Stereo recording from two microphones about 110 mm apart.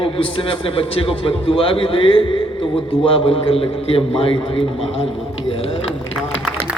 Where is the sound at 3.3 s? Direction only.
60° left (ahead or behind).